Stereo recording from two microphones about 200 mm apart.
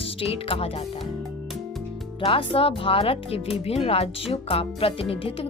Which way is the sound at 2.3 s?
30° left (ahead or behind).